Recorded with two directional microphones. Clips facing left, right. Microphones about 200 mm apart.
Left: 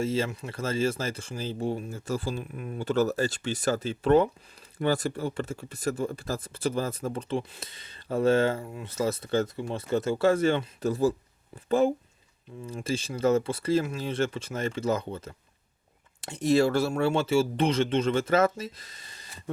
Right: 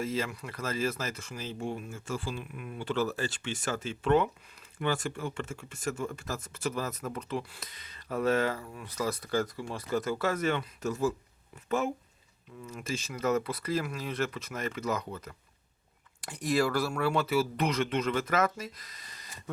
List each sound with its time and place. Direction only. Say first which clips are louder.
0.0 s speech: left 5 dB; 30° left (ahead or behind)